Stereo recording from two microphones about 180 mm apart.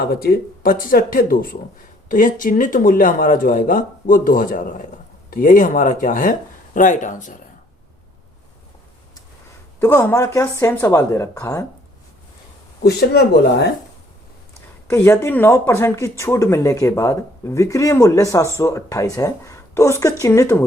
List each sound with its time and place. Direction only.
0.0 s speech: 60° left (ahead or behind)
9.8 s speech: 15° left (ahead or behind)
12.8 s speech: 60° left (ahead or behind)
14.8 s speech: 15° left (ahead or behind)